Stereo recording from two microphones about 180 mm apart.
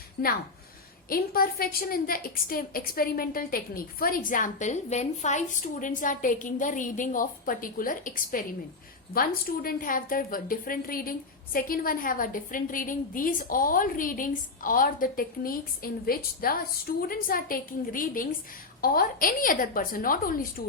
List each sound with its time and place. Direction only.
0.2 s a woman's voice: 55° left (ahead or behind)